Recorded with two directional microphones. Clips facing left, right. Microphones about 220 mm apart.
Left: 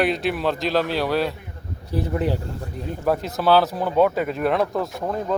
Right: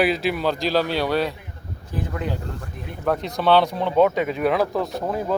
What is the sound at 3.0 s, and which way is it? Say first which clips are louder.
Speech: even; 5° left (ahead or behind).